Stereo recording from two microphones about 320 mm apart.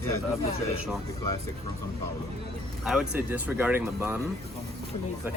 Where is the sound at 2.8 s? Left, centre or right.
Centre.